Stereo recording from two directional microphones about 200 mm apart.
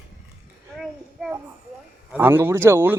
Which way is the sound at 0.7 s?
Centre (ahead or behind).